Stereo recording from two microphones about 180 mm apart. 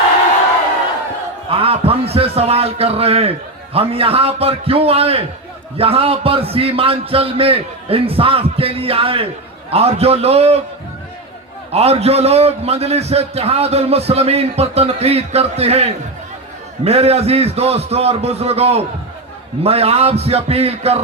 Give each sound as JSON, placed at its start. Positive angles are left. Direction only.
{"t": 1.5, "sound": "a man's voice", "side_deg": -30}
{"t": 11.7, "sound": "a man's voice", "side_deg": -35}